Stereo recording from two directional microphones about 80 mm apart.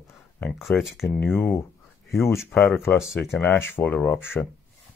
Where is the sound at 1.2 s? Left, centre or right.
Left.